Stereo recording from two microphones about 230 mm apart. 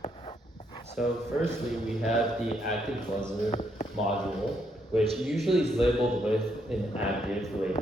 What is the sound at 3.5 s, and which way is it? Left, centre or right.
Speech, left.